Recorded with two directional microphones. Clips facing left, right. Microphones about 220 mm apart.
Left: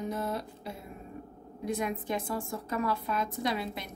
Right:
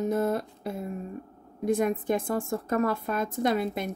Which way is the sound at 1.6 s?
50° right (ahead or behind).